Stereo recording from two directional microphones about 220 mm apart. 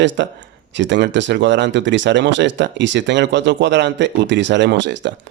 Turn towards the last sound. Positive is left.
turn(degrees=-55)  # may be behind; listen again after turning